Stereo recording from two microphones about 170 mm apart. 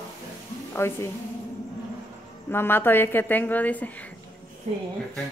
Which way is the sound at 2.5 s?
15° left (ahead or behind).